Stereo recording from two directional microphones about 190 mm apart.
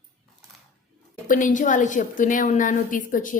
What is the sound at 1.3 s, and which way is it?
A woman's voice, 45° left (ahead or behind).